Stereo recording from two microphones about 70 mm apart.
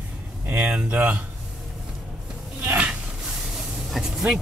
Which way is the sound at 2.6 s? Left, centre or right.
Right.